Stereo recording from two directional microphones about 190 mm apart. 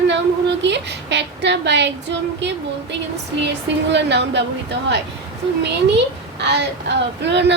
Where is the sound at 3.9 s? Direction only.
65° right (ahead or behind).